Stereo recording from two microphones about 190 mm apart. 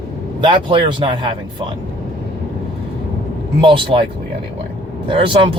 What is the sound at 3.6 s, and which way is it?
Speech, 25° right (ahead or behind).